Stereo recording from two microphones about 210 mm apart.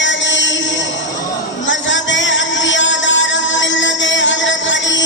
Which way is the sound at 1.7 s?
60° left (ahead or behind).